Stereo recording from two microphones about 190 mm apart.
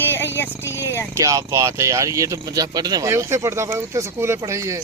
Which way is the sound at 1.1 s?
15° right (ahead or behind).